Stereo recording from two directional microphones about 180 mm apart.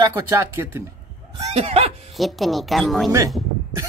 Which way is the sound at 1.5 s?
35° right (ahead or behind).